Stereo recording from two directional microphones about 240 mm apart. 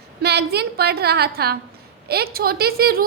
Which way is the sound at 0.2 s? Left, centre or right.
Right.